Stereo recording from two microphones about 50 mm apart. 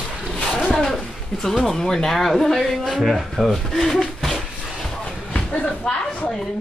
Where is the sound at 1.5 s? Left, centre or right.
Centre.